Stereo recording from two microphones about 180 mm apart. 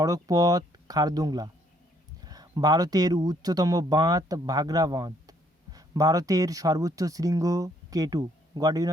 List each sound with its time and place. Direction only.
0.0 s speech: 20° right (ahead or behind)